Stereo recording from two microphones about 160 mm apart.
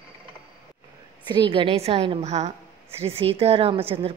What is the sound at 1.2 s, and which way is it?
A woman's voice, 30° right (ahead or behind).